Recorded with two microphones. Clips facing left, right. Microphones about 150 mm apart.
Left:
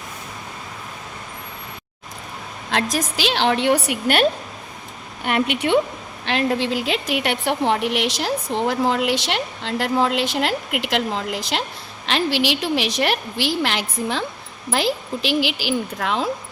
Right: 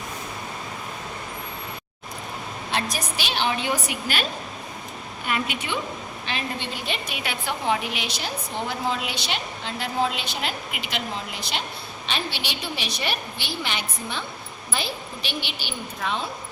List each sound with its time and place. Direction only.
2.6 s a woman's voice: 90° left; by 5.8 s 60° left (ahead or behind)
6.2 s a woman's voice: 80° left